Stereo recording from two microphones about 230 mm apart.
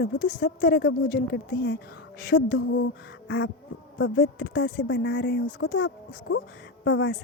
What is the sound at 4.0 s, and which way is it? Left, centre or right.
Speech, left.